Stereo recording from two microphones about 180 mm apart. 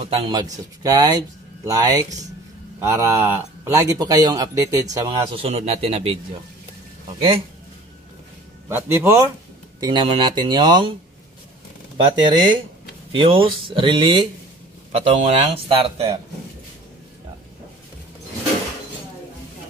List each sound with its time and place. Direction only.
0.0 s speech: 25° right (ahead or behind)
5.4 s a man's voice: 35° right (ahead or behind)
8.6 s a man's voice: 15° right (ahead or behind)
9.8 s speech: 25° right (ahead or behind)
12.0 s a man's voice: 25° right (ahead or behind)